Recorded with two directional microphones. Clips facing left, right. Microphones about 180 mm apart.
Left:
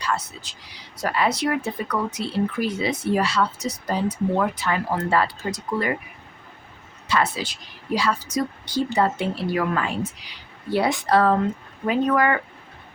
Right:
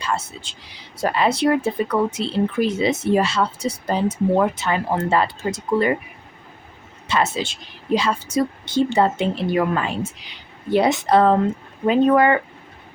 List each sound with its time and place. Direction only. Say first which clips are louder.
0.0 s speech: right 2 dB; 25° right (ahead or behind)
7.1 s speech: right 2 dB; 25° right (ahead or behind)